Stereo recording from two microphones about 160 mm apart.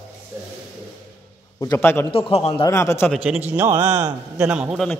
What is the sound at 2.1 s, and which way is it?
Speech, 35° left (ahead or behind).